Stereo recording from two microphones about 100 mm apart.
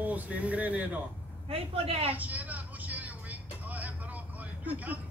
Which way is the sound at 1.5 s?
75° right (ahead or behind).